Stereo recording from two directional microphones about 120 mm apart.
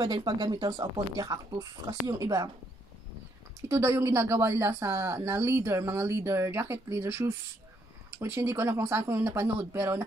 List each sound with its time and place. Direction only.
0.0 s speech: 40° right (ahead or behind)
3.6 s speech: 25° right (ahead or behind)